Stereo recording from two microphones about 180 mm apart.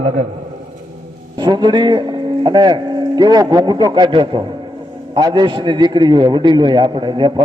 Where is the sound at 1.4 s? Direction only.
25° right (ahead or behind).